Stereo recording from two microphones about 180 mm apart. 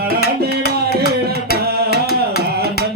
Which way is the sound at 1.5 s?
60° left (ahead or behind).